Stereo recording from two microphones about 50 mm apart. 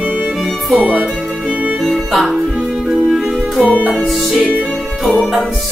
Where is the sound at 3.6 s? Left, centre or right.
Right.